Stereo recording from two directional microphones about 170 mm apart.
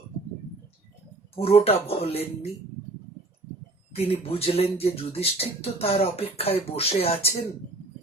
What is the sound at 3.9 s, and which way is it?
Speech, 35° left (ahead or behind).